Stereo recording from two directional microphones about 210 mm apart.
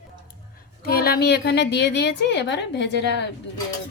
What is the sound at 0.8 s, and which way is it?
A woman's voice, 45° left (ahead or behind).